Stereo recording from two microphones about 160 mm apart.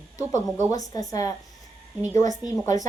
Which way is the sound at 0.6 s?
20° left (ahead or behind).